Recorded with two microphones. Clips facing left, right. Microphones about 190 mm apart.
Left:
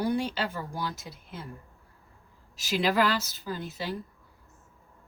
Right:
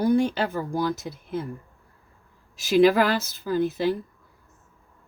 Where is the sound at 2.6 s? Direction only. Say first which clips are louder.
Right 8 dB; 50° right (ahead or behind).